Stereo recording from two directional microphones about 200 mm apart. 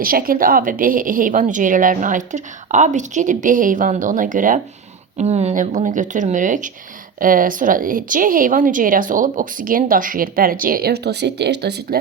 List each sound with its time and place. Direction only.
0.0 s a woman's voice: 45° right (ahead or behind)